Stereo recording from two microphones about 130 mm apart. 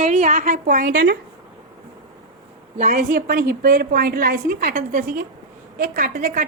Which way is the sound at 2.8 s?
85° right.